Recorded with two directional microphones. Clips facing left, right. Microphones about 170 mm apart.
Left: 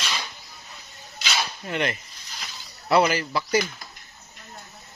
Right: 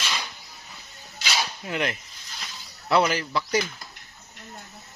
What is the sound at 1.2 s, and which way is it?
Cutlery, 5° right (ahead or behind).